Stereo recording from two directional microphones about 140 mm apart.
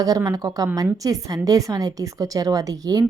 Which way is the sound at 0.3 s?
25° right (ahead or behind).